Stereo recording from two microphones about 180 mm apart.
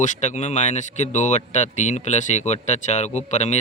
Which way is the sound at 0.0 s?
45° left (ahead or behind).